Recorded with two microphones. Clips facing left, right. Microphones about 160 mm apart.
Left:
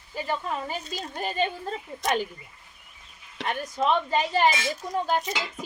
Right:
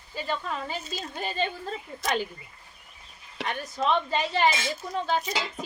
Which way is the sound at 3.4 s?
15° left (ahead or behind).